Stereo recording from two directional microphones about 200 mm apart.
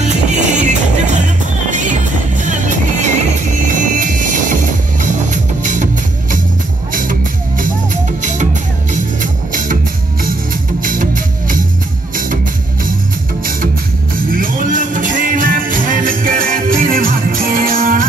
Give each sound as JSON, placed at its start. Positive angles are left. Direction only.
{"t": 0.6, "sound": "music", "side_deg": -35}
{"t": 6.9, "sound": "music", "side_deg": -45}
{"t": 10.8, "sound": "music", "side_deg": -40}
{"t": 14.3, "sound": "music", "side_deg": -45}